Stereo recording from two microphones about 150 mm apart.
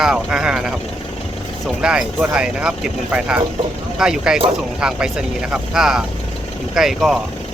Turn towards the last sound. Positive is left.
turn(degrees=0)  # may be behind; listen again after turning